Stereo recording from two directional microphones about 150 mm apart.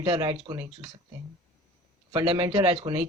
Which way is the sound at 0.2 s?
40° right (ahead or behind).